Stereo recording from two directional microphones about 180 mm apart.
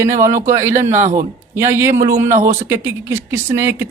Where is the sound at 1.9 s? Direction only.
45° right (ahead or behind).